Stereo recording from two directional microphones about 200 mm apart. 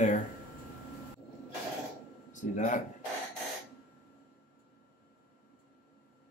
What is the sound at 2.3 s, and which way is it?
Speech, 40° left (ahead or behind).